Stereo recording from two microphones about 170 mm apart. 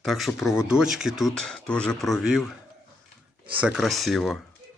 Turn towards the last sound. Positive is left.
turn(degrees=0)  # may be behind; listen again after turning